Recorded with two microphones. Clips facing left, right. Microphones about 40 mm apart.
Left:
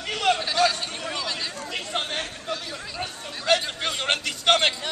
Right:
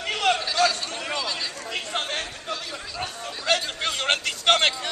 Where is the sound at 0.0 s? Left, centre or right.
Centre.